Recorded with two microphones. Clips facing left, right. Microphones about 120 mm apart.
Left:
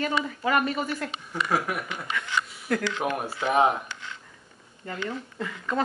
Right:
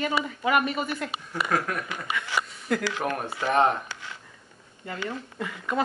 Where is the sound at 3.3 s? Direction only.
5° left (ahead or behind).